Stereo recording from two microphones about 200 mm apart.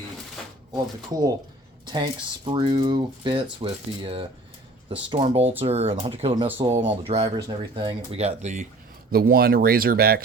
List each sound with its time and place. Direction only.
1.9 s speech: 25° right (ahead or behind)
9.1 s speech: 50° right (ahead or behind)